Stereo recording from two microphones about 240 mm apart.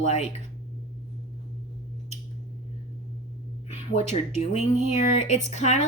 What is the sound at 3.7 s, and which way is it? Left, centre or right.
Speech, left.